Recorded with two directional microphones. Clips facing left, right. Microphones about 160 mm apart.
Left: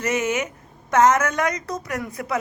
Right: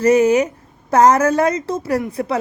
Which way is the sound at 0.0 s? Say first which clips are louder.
Right 10 dB; 35° right (ahead or behind).